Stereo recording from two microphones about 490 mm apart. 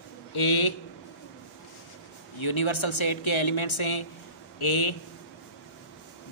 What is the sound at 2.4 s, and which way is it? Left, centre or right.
A man's voice, left.